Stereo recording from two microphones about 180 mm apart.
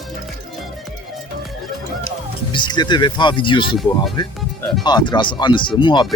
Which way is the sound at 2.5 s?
25° left (ahead or behind).